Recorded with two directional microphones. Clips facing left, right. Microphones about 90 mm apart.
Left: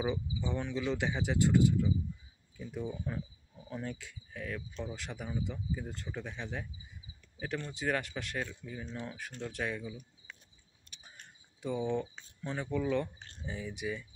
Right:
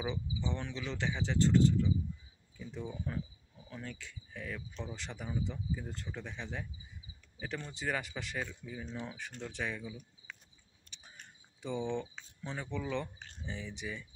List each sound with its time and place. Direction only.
0.0 s speech: 10° left (ahead or behind)
3.7 s speech: 25° left (ahead or behind)
4.0 s speech: 5° left (ahead or behind)
10.9 s cricket: 5° left (ahead or behind)
11.6 s speech: 5° left (ahead or behind)